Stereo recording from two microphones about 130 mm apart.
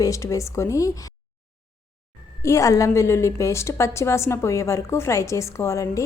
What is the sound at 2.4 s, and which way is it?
A woman's voice, 25° left (ahead or behind).